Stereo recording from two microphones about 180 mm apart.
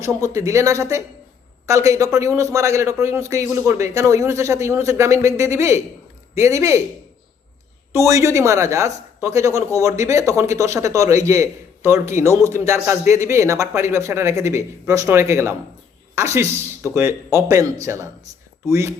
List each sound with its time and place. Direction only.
0.0 s speech: 15° right (ahead or behind)
7.9 s speech: 15° right (ahead or behind)